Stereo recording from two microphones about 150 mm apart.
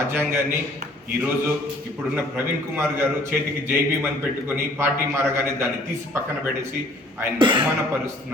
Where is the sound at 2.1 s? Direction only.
15° right (ahead or behind).